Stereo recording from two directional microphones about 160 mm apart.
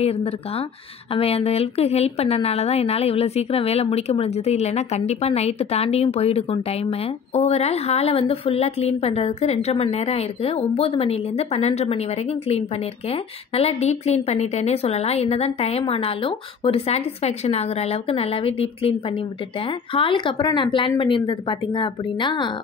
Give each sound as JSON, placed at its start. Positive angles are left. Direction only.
{"t": 0.0, "sound": "a woman's voice", "side_deg": 40}